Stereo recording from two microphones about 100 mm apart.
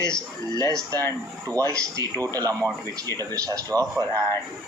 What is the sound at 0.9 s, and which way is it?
Speech, 25° left (ahead or behind).